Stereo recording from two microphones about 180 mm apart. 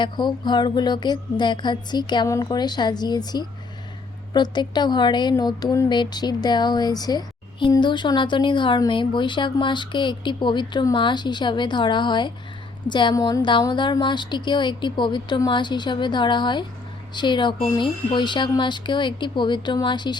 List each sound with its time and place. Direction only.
0.0 s speech: 25° left (ahead or behind)